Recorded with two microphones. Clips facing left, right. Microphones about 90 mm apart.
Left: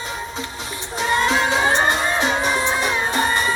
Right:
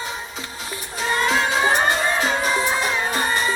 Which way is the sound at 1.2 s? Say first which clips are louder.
Right 2 dB; 25° left (ahead or behind).